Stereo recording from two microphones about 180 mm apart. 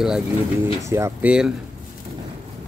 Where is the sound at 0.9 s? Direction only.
15° right (ahead or behind).